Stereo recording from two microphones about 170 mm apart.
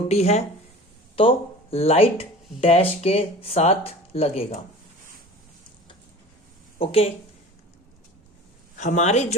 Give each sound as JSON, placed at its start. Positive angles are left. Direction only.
{"t": 0.1, "sound": "speech", "side_deg": 40}
{"t": 6.7, "sound": "speech", "side_deg": 35}
{"t": 8.8, "sound": "speech", "side_deg": 45}